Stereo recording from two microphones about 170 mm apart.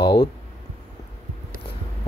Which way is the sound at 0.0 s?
25° left (ahead or behind).